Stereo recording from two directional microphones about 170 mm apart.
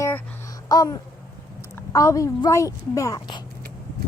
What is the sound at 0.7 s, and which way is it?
Speech, 20° left (ahead or behind).